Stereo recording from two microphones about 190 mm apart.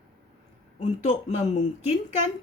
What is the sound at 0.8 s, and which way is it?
Speech, 40° left (ahead or behind).